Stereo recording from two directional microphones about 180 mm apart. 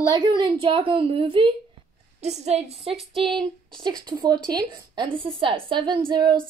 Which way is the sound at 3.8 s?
25° right (ahead or behind).